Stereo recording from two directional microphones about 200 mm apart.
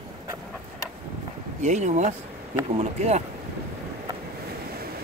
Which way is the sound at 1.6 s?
35° right (ahead or behind).